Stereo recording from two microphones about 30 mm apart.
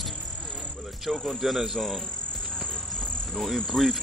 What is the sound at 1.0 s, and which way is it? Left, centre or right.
Speech, centre.